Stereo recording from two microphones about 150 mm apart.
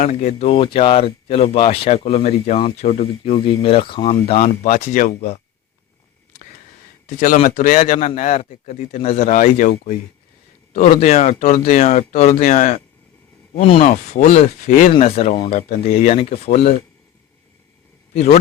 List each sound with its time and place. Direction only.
0.0 s speech: 55° left (ahead or behind); by 4.4 s 35° left (ahead or behind)
4.4 s speech: 60° left (ahead or behind)
7.1 s speech: 60° left (ahead or behind)
8.4 s speech: 45° left (ahead or behind)
8.7 s speech: 55° left (ahead or behind)
10.8 s speech: 45° left (ahead or behind)
13.6 s speech: 40° left (ahead or behind)
13.8 s speech: 55° left (ahead or behind)
14.9 s speech: 45° left (ahead or behind)
18.1 s speech: 45° left (ahead or behind)